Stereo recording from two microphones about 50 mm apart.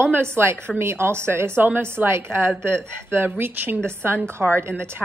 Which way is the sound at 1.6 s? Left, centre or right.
Right.